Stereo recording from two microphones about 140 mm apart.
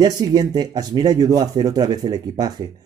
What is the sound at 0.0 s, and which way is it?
Speech, 25° right (ahead or behind).